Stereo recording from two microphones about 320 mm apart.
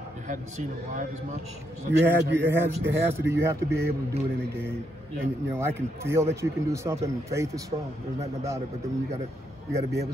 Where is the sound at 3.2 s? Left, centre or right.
Right.